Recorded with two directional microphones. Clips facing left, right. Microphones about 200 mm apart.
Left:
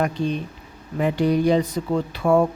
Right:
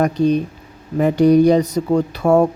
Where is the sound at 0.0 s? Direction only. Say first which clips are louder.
Right 8 dB; 40° right (ahead or behind).